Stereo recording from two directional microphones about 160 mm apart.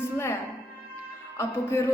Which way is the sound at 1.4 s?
15° left (ahead or behind).